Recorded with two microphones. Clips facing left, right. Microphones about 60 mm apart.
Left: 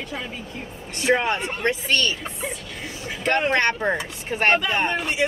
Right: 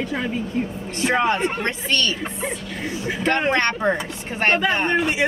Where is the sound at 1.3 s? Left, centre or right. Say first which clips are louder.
Right 4 dB; right.